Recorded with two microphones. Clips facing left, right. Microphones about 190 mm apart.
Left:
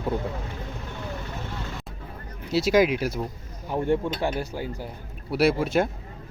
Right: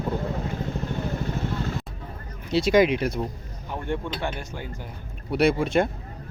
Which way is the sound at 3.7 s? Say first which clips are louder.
Left 5 dB; 40° left (ahead or behind).